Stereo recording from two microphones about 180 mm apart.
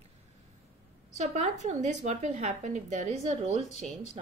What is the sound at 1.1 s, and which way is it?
A woman's voice, 40° right (ahead or behind).